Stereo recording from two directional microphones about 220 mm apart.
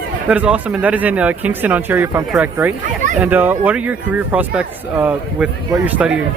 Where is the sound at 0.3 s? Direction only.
5° right (ahead or behind).